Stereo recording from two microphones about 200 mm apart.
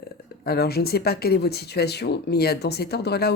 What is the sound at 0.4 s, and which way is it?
Speech, 50° left (ahead or behind).